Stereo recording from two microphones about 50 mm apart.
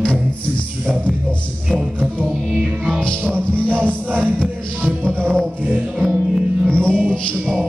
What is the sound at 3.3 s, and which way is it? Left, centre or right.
Music, right.